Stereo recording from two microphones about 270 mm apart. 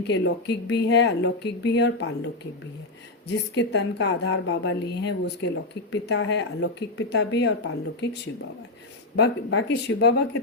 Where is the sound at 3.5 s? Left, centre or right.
Left.